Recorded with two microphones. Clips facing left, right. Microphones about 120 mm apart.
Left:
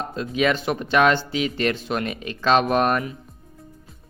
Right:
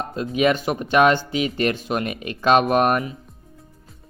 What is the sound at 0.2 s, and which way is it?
Speech, 45° right (ahead or behind).